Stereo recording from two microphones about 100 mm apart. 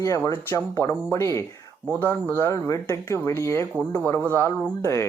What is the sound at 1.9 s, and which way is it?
Speech, 15° left (ahead or behind).